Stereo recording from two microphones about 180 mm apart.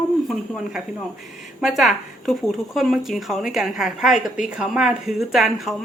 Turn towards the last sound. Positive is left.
turn(degrees=0)  # may be behind; listen again after turning